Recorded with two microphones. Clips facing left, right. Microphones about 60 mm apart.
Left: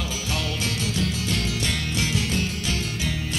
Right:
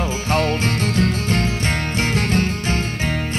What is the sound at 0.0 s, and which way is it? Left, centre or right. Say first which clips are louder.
Music: right 9 dB; right.